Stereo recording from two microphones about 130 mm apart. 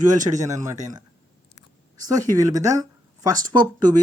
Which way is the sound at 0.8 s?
30° right (ahead or behind).